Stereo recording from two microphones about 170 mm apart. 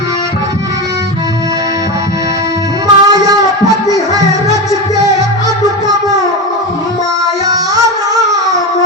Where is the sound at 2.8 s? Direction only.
20° right (ahead or behind).